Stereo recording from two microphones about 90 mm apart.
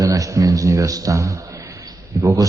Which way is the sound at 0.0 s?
40° right (ahead or behind).